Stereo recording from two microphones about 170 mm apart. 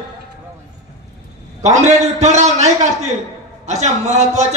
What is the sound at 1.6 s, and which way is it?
A man's voice, 40° right (ahead or behind).